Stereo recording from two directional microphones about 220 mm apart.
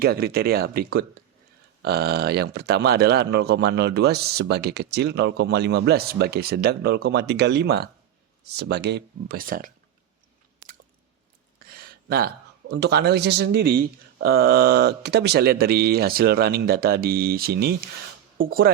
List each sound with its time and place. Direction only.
0.0 s speech: 45° right (ahead or behind)
11.7 s speech: 40° right (ahead or behind)